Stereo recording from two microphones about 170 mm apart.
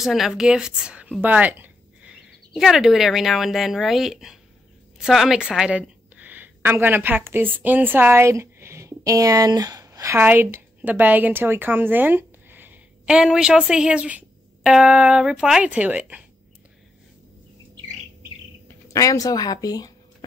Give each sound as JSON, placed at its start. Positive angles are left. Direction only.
{"t": 0.0, "sound": "a woman's voice", "side_deg": 0}
{"t": 18.9, "sound": "a woman's voice", "side_deg": 20}